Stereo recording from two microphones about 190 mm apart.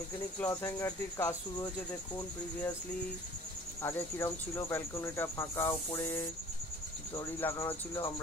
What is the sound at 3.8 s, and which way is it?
Speech, 15° left (ahead or behind).